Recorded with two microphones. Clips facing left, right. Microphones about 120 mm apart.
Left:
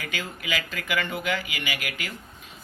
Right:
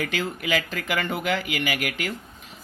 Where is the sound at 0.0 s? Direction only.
45° right (ahead or behind).